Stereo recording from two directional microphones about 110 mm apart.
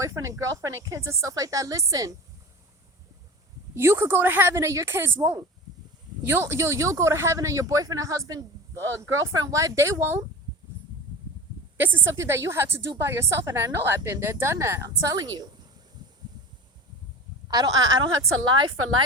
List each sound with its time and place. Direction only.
0.0 s speech: 30° right (ahead or behind)
3.8 s speech: 25° right (ahead or behind)
12.1 s a woman's voice: 25° right (ahead or behind)
17.5 s a woman's voice: 35° right (ahead or behind)